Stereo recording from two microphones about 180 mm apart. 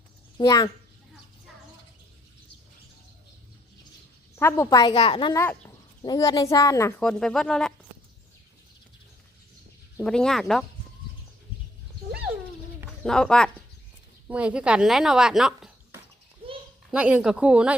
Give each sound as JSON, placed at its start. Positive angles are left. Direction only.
{"t": 0.3, "sound": "a woman's voice", "side_deg": 25}
{"t": 4.4, "sound": "a woman's voice", "side_deg": 15}
{"t": 5.4, "sound": "speech", "side_deg": 15}
{"t": 7.0, "sound": "speech", "side_deg": 5}
{"t": 10.0, "sound": "speech", "side_deg": 5}
{"t": 13.0, "sound": "speech", "side_deg": 5}
{"t": 14.3, "sound": "speech", "side_deg": -5}
{"t": 16.9, "sound": "speech", "side_deg": -5}